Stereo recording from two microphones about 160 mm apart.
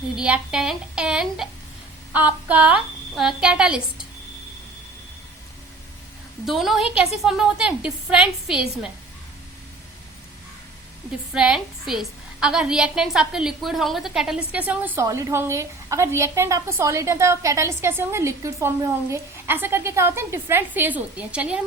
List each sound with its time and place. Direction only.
0.2 s a woman's voice: 5° right (ahead or behind)
6.4 s a woman's voice: centre (ahead or behind)
11.3 s a woman's voice: 5° right (ahead or behind)